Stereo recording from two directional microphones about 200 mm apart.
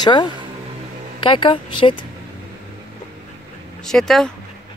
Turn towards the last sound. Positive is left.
turn(degrees=0)  # may be behind; listen again after turning